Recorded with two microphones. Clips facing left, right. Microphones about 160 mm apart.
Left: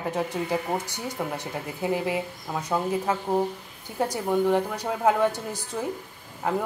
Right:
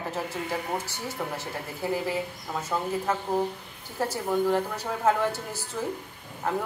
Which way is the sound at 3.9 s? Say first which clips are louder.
Left 2 dB; 15° left (ahead or behind).